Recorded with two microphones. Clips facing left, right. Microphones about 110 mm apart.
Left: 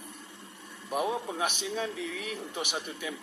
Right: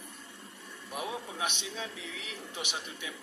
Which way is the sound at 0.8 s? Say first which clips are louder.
Left 7 dB; 40° left (ahead or behind).